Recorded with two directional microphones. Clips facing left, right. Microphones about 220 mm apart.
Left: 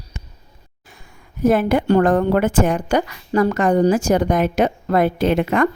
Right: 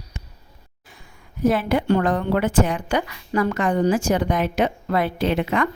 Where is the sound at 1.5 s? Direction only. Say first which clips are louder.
Left 4 dB; 50° left (ahead or behind).